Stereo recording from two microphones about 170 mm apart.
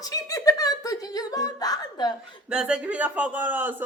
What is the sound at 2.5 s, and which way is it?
A man's voice, 5° right (ahead or behind).